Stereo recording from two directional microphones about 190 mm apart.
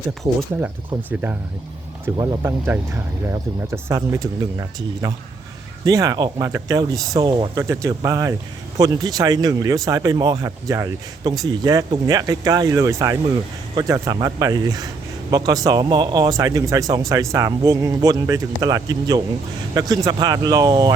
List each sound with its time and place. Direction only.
2.1 s speech: 20° right (ahead or behind)